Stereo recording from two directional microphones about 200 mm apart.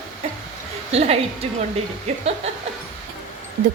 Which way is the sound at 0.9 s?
30° right (ahead or behind).